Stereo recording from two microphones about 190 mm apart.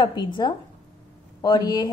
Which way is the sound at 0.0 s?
20° left (ahead or behind).